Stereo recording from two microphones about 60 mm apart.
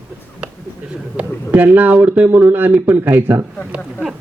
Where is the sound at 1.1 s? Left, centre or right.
Right.